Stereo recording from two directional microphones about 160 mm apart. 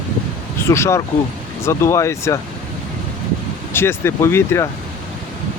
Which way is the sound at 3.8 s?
15° left (ahead or behind).